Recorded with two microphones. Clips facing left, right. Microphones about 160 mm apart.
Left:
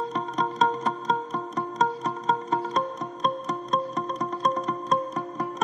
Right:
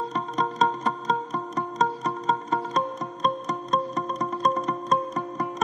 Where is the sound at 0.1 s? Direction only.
Centre (ahead or behind).